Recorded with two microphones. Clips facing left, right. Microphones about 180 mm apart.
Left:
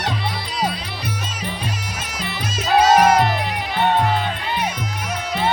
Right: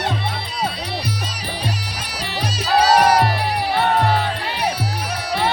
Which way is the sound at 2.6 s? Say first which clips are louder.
Left 1 dB; 35° right (ahead or behind).